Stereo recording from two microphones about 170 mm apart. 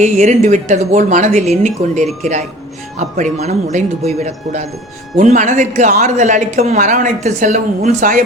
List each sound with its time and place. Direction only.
0.0 s a woman's voice: 45° right (ahead or behind)